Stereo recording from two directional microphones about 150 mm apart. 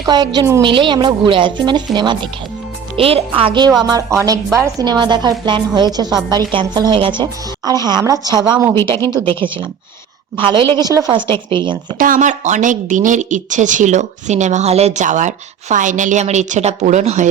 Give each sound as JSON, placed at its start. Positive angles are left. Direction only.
{"t": 0.0, "sound": "a woman's voice", "side_deg": -30}
{"t": 3.8, "sound": "a woman's voice", "side_deg": -20}
{"t": 11.9, "sound": "speech", "side_deg": -65}